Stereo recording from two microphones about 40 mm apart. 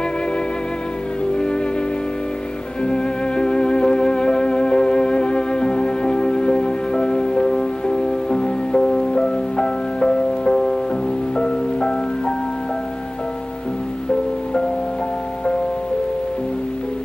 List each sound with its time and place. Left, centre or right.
1.3 s music: left
2.8 s music: left